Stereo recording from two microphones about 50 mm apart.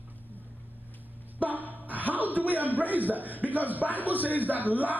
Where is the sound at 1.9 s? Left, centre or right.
Right.